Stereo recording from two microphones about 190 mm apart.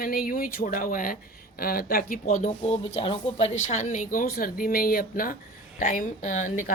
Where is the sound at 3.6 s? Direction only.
40° left (ahead or behind).